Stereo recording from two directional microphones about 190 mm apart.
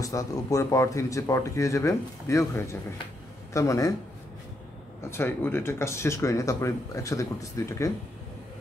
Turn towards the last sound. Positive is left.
turn(degrees=15)  # may be behind; listen again after turning